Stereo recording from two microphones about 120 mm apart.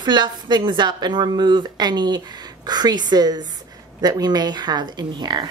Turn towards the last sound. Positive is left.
turn(degrees=-35)  # may be behind; listen again after turning